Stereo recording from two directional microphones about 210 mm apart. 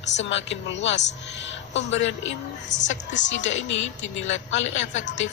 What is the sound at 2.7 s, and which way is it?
Speech, 35° left (ahead or behind).